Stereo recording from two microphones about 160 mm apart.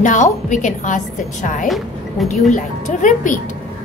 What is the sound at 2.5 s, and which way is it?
Speech, 50° left (ahead or behind).